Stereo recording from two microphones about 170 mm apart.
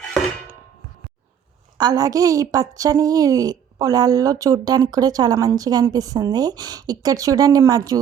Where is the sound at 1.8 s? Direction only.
25° right (ahead or behind).